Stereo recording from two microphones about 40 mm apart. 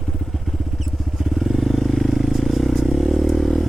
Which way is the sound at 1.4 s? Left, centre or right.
Centre.